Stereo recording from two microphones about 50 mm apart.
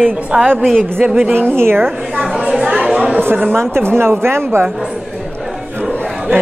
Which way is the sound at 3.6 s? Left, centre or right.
Right.